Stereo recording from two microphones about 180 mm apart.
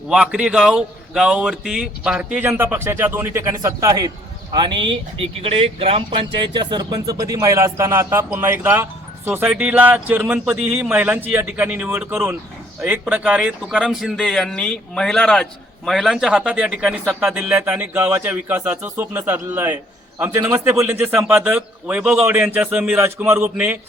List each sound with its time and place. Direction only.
0.1 s speech: 5° right (ahead or behind)